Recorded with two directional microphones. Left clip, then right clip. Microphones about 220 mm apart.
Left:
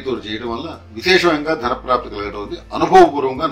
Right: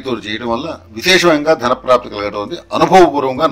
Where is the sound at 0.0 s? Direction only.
50° right (ahead or behind).